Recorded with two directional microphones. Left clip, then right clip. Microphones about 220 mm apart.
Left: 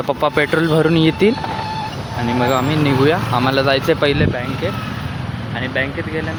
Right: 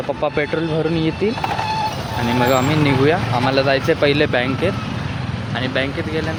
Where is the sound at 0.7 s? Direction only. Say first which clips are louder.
Left 5 dB; 25° left (ahead or behind).